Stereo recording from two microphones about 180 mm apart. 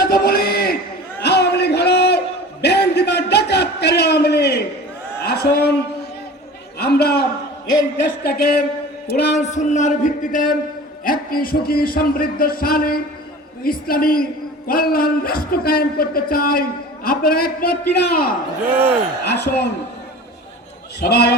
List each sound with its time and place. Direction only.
0.0 s a sound: 55° left (ahead or behind)
6.7 s a sound: 60° left (ahead or behind)
7.8 s a man's voice: 60° left (ahead or behind)
9.3 s a man's voice: 40° left (ahead or behind); by 18.3 s 55° left (ahead or behind)
19.2 s a man's voice: 70° left (ahead or behind)
21.0 s a man's voice: 65° left (ahead or behind)